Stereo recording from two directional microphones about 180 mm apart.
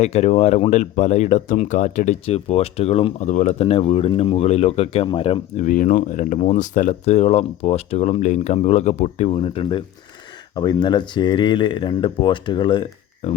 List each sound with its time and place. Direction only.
0.0 s speech: 35° left (ahead or behind)
13.2 s speech: 35° left (ahead or behind)